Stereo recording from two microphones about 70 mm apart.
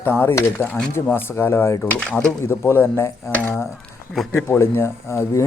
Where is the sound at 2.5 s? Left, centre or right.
Left.